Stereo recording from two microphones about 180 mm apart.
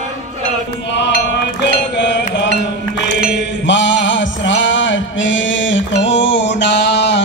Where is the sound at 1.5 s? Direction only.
75° left (ahead or behind).